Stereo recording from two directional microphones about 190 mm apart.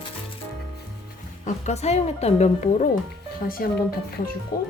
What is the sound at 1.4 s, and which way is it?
A woman's voice, 35° left (ahead or behind).